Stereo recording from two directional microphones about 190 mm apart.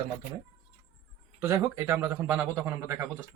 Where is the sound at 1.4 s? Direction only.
10° right (ahead or behind).